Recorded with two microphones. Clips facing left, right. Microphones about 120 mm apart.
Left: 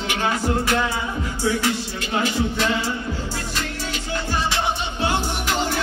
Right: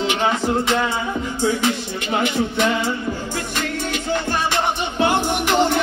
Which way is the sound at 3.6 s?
60° right (ahead or behind).